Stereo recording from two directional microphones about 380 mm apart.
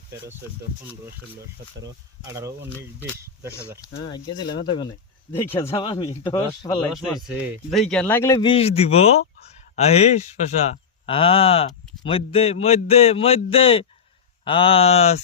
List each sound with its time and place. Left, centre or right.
1.8 s speech: centre
4.1 s speech: centre
6.9 s speech: centre